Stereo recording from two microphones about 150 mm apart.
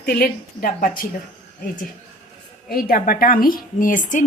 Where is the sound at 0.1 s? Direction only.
80° left.